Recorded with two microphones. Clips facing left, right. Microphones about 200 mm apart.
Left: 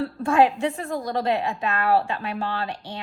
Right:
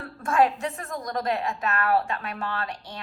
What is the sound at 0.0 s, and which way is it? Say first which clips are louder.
A woman's voice: left 4 dB; 30° left (ahead or behind).